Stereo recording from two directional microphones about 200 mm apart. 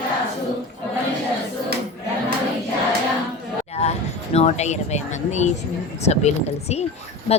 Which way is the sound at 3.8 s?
30° left (ahead or behind).